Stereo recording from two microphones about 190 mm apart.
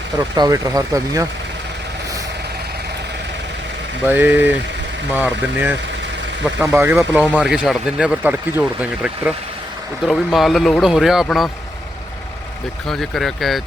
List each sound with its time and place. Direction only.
0.2 s speech: 20° right (ahead or behind)
4.0 s speech: 10° right (ahead or behind)
12.9 s speech: centre (ahead or behind)